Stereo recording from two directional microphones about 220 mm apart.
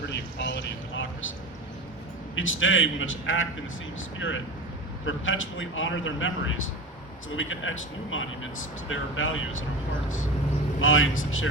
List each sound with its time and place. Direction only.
0.1 s a sound: 50° left (ahead or behind)
2.3 s speech: 60° left (ahead or behind)
5.0 s speech: 60° left (ahead or behind)
10.8 s speech: 65° left (ahead or behind)